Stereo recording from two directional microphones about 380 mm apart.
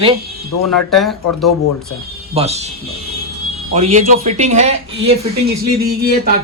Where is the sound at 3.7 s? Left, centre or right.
Centre.